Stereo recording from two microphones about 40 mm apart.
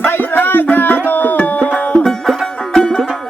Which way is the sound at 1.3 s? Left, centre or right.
Left.